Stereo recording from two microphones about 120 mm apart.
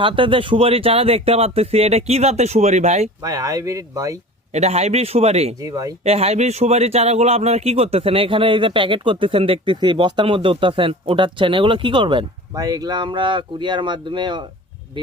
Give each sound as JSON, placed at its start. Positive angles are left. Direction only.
{"t": 0.0, "sound": "speech", "side_deg": -45}
{"t": 3.2, "sound": "speech", "side_deg": -30}
{"t": 4.5, "sound": "speech", "side_deg": -65}
{"t": 5.5, "sound": "speech", "side_deg": -30}
{"t": 6.0, "sound": "speech", "side_deg": -60}
{"t": 12.5, "sound": "speech", "side_deg": -30}